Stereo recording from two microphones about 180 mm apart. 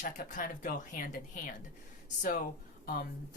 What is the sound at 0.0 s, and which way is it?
Speech, 50° left (ahead or behind).